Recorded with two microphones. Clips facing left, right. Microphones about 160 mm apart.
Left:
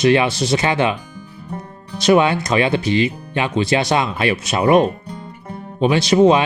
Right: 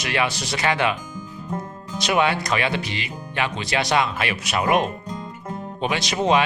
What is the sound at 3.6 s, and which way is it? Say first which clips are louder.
Speech: left 9 dB; 25° left (ahead or behind).